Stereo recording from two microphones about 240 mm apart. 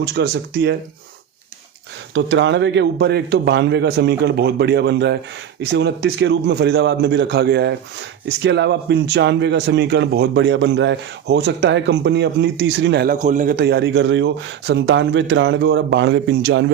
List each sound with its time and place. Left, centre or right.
0.0 s a man's voice: right
2.1 s a man's voice: right